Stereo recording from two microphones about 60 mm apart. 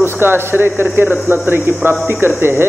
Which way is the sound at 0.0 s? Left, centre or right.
Right.